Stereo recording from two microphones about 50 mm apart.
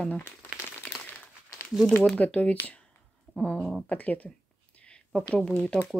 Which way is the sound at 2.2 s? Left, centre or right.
Left.